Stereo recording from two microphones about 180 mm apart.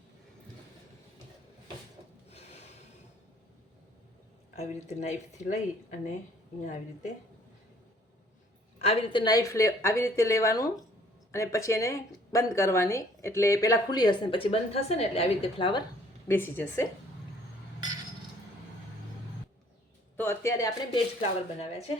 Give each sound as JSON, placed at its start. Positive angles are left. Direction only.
{"t": 2.3, "sound": "snort", "side_deg": 35}
{"t": 4.5, "sound": "speech", "side_deg": 40}
{"t": 8.8, "sound": "speech", "side_deg": 35}
{"t": 16.3, "sound": "speech", "side_deg": 10}
{"t": 20.1, "sound": "a sound", "side_deg": 15}
{"t": 20.9, "sound": "speech", "side_deg": 35}